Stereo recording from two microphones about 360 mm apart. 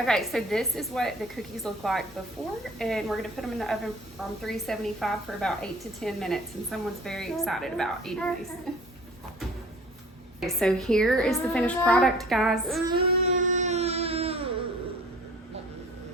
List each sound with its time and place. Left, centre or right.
0.0 s a woman's voice: centre
10.4 s a woman's voice: centre
12.9 s music: centre